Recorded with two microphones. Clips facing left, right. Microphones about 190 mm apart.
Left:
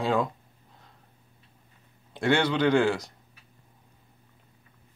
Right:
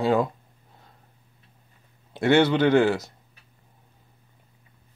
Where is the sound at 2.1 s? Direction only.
5° right (ahead or behind).